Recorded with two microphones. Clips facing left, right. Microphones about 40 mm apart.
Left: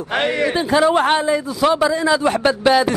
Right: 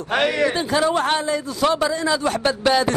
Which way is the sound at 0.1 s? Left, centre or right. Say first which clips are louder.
Left 1 dB; left.